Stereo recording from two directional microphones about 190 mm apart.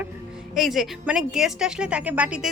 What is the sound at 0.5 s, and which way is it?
A woman's voice, centre (ahead or behind).